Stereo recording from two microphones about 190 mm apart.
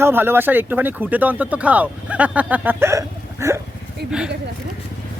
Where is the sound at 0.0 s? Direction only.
10° right (ahead or behind).